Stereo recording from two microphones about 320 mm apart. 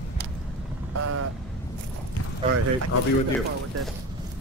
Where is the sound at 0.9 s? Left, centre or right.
Right.